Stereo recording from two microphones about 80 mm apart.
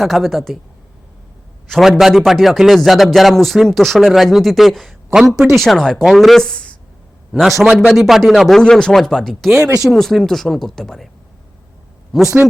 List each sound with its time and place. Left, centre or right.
0.0 s a man's voice: centre
1.6 s a man's voice: centre
5.6 s speech: centre
7.6 s a man's voice: centre
9.6 s speech: right
9.8 s a man's voice: centre
12.1 s a man's voice: centre